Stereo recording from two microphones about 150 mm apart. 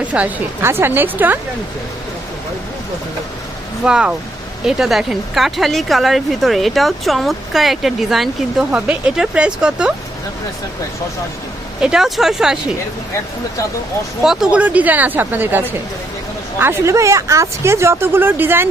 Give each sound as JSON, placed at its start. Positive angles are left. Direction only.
{"t": 0.0, "sound": "speech", "side_deg": -10}
{"t": 3.8, "sound": "speech", "side_deg": -5}
{"t": 11.8, "sound": "speech", "side_deg": -5}
{"t": 14.3, "sound": "speech", "side_deg": -5}